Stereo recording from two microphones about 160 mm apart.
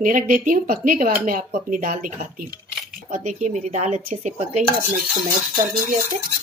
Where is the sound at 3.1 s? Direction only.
45° right (ahead or behind).